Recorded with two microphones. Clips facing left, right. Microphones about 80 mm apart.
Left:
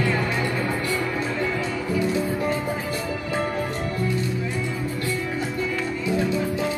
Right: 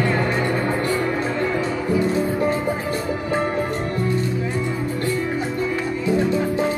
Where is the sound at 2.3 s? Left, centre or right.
Right.